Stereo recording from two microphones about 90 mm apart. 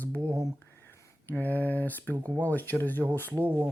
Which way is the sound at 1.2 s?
20° left (ahead or behind).